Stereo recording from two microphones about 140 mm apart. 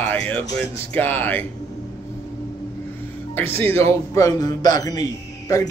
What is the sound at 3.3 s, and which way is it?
A man's voice, 15° left (ahead or behind).